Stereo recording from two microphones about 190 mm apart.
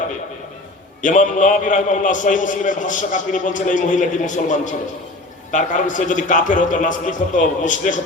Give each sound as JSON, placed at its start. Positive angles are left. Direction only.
{"t": 1.0, "sound": "a man's voice", "side_deg": 40}